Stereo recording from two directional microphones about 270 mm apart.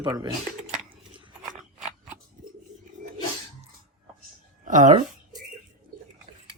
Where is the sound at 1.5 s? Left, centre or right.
Centre.